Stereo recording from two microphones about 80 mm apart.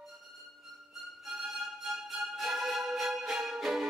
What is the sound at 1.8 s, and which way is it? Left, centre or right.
Music, centre.